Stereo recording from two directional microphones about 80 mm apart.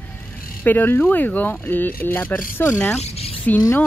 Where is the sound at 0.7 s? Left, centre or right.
Left.